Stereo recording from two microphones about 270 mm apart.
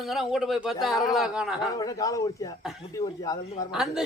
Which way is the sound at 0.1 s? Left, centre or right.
Centre.